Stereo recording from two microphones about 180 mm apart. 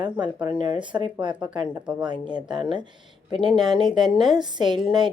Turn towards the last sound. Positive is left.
turn(degrees=-25)  # may be behind; listen again after turning